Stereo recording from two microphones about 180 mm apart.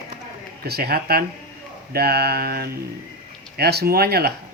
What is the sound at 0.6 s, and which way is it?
Speech, 60° right (ahead or behind).